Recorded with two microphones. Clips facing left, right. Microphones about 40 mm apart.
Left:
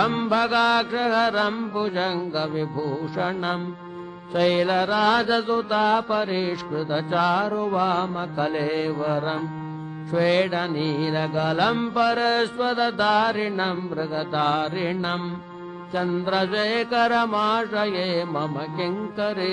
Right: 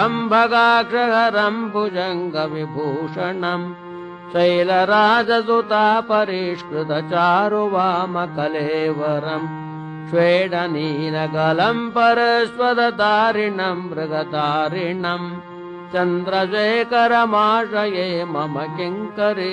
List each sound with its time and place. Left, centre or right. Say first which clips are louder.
0.3 s mantra: right 8 dB; right
1.6 s music: right 4 dB; right
3.2 s mantra: right 1 dB; right
15.9 s music: right 6 dB; right
16.3 s mantra: right 5 dB; right